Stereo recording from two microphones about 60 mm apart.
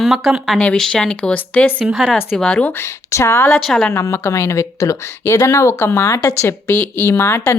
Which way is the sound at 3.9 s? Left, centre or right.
Left.